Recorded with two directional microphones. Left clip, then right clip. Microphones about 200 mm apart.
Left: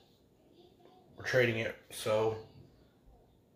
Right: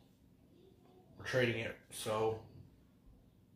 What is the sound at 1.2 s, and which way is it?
Speech, 15° left (ahead or behind).